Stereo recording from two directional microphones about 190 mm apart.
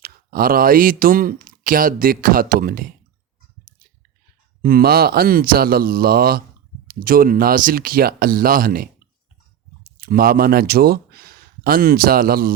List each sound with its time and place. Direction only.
0.0 s speech: 50° right (ahead or behind)
4.6 s speech: 50° right (ahead or behind)
10.0 s speech: 50° right (ahead or behind)